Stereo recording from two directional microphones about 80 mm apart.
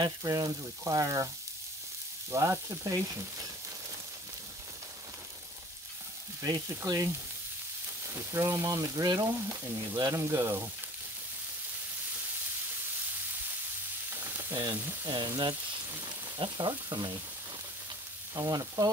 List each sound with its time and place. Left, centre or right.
0.0 s frying: right
2.3 s frying: right
6.8 s frying: right
8.1 s frying: right
9.9 s speech: right
14.1 s frying: right
15.0 s speech: right
18.3 s frying: right